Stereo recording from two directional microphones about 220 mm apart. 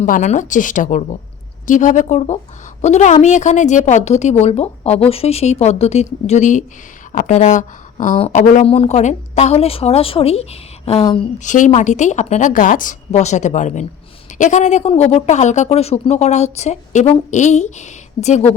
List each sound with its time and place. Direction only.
0.0 s a woman's voice: 35° left (ahead or behind)
11.4 s a woman's voice: 35° left (ahead or behind)